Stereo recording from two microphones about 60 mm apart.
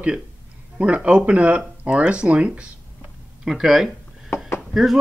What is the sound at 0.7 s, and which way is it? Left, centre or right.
Speech, right.